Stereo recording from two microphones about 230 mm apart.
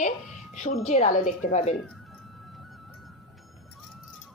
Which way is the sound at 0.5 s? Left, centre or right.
Left.